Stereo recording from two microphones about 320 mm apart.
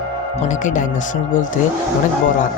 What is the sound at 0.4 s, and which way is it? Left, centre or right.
Speech, left.